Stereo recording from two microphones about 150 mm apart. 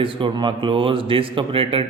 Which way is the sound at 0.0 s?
35° right (ahead or behind).